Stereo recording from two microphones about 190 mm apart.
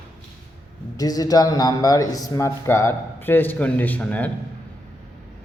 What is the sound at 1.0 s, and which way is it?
A man's voice, 20° left (ahead or behind).